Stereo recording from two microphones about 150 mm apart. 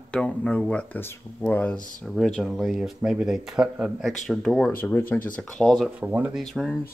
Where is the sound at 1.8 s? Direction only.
60° left (ahead or behind).